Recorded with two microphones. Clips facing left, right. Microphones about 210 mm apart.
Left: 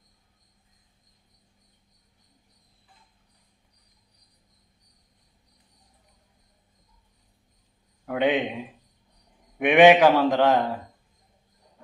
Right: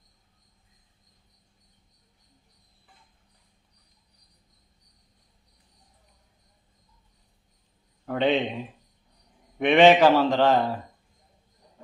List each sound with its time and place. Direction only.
8.0 s a man's voice: 10° left (ahead or behind)